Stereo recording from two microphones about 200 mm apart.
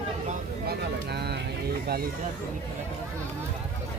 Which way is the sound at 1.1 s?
55° right (ahead or behind).